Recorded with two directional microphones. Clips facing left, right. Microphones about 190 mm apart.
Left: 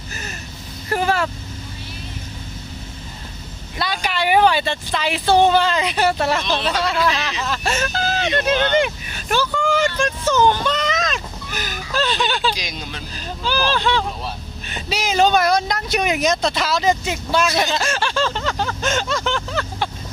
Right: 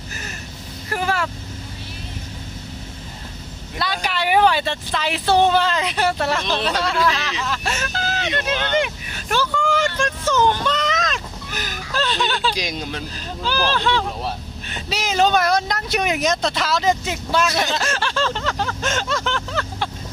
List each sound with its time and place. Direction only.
0.9 s speech: 30° left (ahead or behind)
3.8 s speech: centre (ahead or behind)
7.3 s speech: 35° left (ahead or behind)
9.3 s a sound: 10° left (ahead or behind)
12.0 s speech: 5° left (ahead or behind)
12.5 s speech: 50° right (ahead or behind)
13.1 s speech: 5° left (ahead or behind)